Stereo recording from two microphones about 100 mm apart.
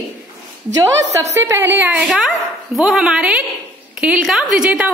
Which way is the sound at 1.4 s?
25° right (ahead or behind).